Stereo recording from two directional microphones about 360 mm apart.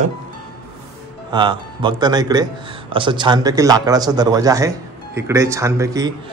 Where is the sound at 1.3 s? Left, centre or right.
Centre.